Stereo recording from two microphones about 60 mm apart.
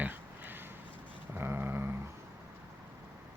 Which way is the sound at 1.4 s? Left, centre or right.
Right.